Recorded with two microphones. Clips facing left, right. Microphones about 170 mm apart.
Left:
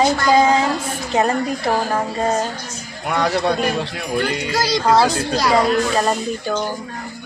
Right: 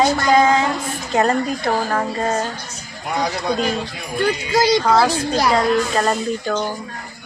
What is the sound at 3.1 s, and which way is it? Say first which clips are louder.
Speech: left 2 dB; 65° left (ahead or behind).